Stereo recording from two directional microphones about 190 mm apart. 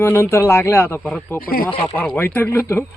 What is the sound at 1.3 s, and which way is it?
Speech, 50° left (ahead or behind).